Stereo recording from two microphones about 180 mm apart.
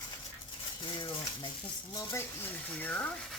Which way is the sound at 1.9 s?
15° left (ahead or behind).